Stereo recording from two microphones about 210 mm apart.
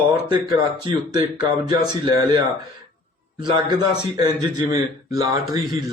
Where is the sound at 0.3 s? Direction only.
20° right (ahead or behind).